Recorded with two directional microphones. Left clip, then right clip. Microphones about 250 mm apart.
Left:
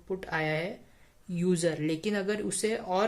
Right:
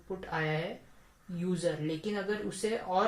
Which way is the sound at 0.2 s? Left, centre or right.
Left.